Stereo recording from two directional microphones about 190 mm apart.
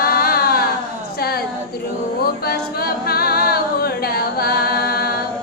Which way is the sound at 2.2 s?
55° left (ahead or behind).